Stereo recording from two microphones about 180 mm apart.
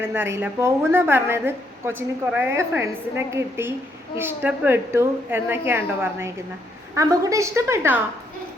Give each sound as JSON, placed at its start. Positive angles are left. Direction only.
{"t": 0.1, "sound": "a woman's voice", "side_deg": -15}